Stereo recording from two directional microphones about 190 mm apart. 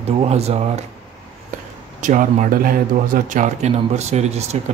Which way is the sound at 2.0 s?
40° right (ahead or behind).